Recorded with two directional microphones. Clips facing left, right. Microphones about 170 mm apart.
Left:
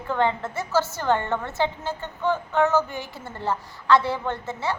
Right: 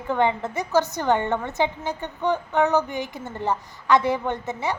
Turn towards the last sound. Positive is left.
turn(degrees=-15)  # may be behind; listen again after turning